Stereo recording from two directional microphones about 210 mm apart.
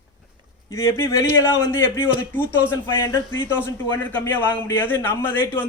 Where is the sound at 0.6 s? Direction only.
15° left (ahead or behind).